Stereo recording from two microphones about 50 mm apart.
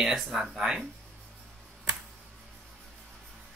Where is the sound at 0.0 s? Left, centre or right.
Centre.